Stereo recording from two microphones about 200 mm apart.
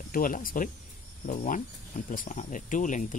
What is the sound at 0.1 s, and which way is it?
Speech, 45° left (ahead or behind).